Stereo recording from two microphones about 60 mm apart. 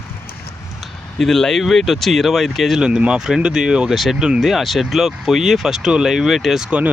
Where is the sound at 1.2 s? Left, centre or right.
Centre.